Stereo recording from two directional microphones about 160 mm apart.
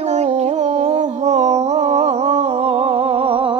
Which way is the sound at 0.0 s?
45° right (ahead or behind).